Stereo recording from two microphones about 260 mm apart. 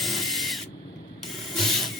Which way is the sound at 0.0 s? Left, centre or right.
Centre.